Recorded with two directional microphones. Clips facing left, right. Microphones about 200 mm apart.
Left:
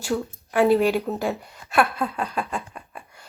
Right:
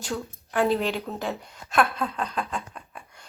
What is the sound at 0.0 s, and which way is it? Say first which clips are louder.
A woman's voice: left 6 dB; 5° left (ahead or behind).